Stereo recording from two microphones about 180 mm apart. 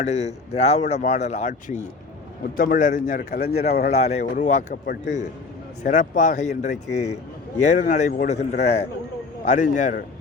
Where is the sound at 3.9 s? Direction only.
35° left (ahead or behind).